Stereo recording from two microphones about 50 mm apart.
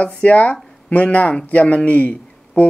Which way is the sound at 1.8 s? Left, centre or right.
Left.